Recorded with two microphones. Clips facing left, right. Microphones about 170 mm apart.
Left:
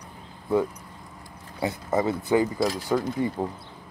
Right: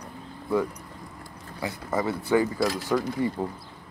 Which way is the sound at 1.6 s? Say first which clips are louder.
Left 3 dB; 20° left (ahead or behind).